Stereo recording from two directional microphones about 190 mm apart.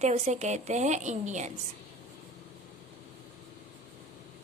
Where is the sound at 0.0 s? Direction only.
35° right (ahead or behind).